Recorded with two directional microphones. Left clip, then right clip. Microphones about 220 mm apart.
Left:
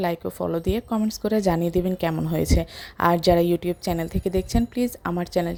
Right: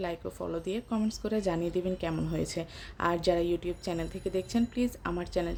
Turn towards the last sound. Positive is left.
turn(degrees=30)  # may be behind; listen again after turning